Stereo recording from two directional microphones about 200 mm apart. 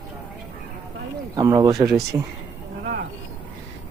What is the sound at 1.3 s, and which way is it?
Speech, 20° right (ahead or behind).